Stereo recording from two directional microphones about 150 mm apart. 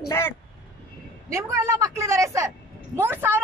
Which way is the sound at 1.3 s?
20° right (ahead or behind).